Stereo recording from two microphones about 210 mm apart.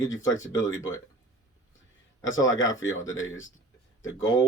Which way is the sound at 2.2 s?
70° left (ahead or behind).